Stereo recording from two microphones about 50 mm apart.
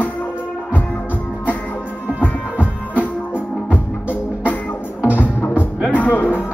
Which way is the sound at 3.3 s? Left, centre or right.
Left.